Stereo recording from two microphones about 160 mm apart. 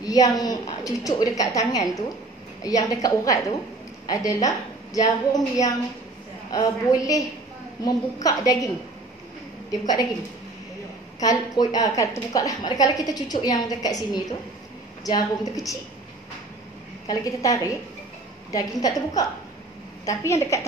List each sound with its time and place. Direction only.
0.0 s a woman's voice: 25° left (ahead or behind)
9.7 s a woman's voice: 25° left (ahead or behind)
11.1 s a woman's voice: 25° left (ahead or behind)
17.1 s a woman's voice: 20° left (ahead or behind)